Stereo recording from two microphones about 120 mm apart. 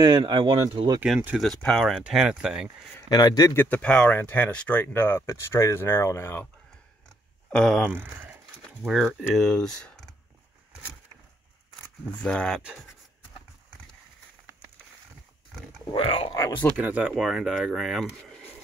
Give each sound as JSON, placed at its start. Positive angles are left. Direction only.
{"t": 0.0, "sound": "speech", "side_deg": -35}
{"t": 1.4, "sound": "speech", "side_deg": 5}
{"t": 3.1, "sound": "a man's voice", "side_deg": 35}
{"t": 3.5, "sound": "speech", "side_deg": 15}
{"t": 7.5, "sound": "speech", "side_deg": 5}
{"t": 7.9, "sound": "speech", "side_deg": -15}
{"t": 8.8, "sound": "speech", "side_deg": 0}
{"t": 12.2, "sound": "speech", "side_deg": 10}
{"t": 16.1, "sound": "speech", "side_deg": 50}
{"t": 16.7, "sound": "speech", "side_deg": -10}